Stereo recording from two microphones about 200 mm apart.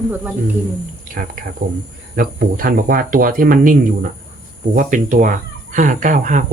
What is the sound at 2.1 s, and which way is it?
Speech, 45° right (ahead or behind).